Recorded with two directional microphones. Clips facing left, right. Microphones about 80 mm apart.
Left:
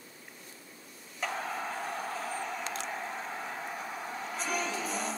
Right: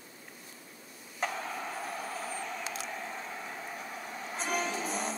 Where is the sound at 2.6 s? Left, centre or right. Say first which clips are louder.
Left 2 dB; centre.